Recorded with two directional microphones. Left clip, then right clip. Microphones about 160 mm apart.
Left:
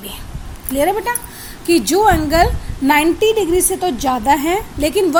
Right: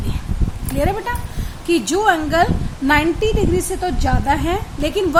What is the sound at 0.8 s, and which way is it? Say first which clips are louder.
A woman's voice: left 4 dB; 20° left (ahead or behind).